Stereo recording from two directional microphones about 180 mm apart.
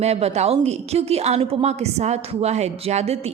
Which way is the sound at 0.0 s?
35° right (ahead or behind).